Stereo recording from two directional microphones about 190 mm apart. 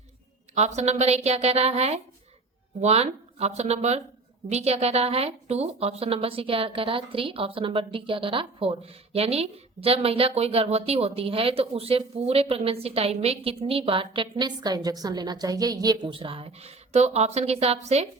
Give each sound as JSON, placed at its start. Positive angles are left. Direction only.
{"t": 0.5, "sound": "a woman's voice", "side_deg": -35}